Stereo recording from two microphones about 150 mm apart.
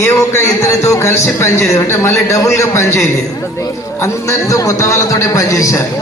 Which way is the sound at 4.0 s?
20° left (ahead or behind).